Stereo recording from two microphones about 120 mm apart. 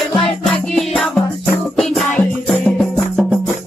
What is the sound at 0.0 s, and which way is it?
Music, 5° left (ahead or behind).